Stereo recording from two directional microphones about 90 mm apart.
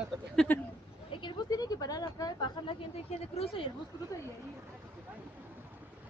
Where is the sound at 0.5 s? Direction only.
20° left (ahead or behind).